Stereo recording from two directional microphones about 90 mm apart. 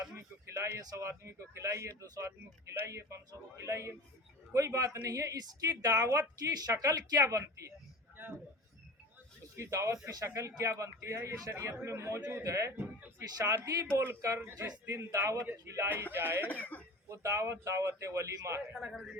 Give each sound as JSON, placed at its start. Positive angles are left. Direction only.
{"t": 0.5, "sound": "speech", "side_deg": -35}
{"t": 9.6, "sound": "speech", "side_deg": -35}
{"t": 12.7, "sound": "a man's voice", "side_deg": -20}
{"t": 16.5, "sound": "speech", "side_deg": 20}
{"t": 17.1, "sound": "speech", "side_deg": -35}